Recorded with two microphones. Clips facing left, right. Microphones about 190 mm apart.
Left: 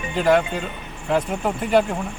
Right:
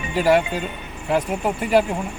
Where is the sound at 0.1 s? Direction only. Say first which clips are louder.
Right 1 dB; 5° right (ahead or behind).